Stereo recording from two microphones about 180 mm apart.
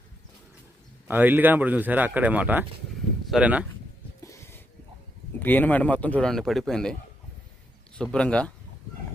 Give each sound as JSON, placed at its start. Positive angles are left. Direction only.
{"t": 1.0, "sound": "speech", "side_deg": -10}
{"t": 4.2, "sound": "a sound", "side_deg": 15}
{"t": 5.4, "sound": "speech", "side_deg": 10}
{"t": 7.9, "sound": "a man's voice", "side_deg": 5}